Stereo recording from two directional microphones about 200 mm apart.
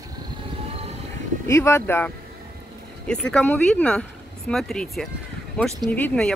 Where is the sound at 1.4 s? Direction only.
15° left (ahead or behind).